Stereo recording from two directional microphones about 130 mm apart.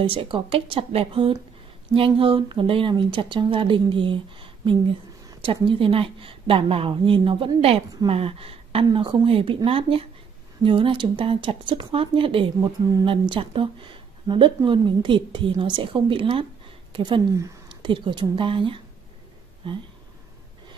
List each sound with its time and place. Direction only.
0.0 s a woman's voice: 45° right (ahead or behind)